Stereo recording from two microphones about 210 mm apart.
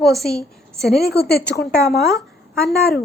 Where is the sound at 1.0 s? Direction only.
50° left (ahead or behind).